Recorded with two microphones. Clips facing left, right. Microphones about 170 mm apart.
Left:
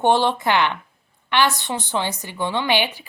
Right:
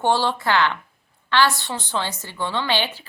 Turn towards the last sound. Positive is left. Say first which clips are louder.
# left 2 dB
turn(degrees=15)  # may be behind; listen again after turning